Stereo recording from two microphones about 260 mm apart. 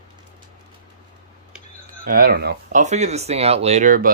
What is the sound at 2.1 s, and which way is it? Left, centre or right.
Speech, right.